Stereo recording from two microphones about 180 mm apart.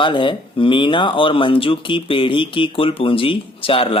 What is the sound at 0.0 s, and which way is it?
Speech, 25° left (ahead or behind).